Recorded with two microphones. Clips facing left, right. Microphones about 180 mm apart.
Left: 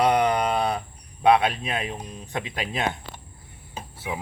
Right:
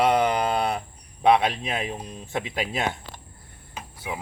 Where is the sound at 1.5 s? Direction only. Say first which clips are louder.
Even; centre (ahead or behind).